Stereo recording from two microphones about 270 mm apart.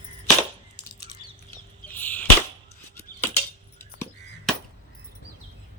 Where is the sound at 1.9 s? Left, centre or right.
Centre.